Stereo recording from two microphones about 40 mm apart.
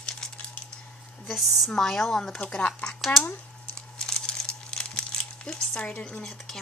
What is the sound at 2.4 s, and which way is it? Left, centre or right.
Speech, left.